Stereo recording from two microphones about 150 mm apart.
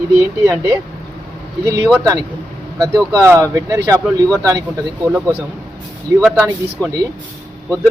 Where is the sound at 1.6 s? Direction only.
20° right (ahead or behind).